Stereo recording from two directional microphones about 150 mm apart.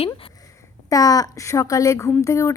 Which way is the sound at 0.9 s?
25° left (ahead or behind).